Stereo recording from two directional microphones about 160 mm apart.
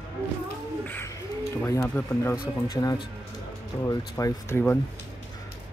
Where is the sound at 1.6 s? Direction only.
15° left (ahead or behind).